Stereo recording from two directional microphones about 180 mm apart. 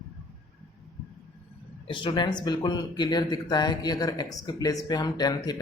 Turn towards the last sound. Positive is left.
turn(degrees=20)  # may be behind; listen again after turning